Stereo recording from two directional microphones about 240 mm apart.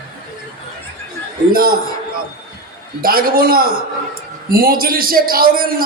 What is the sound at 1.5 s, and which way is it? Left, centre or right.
Speech, right.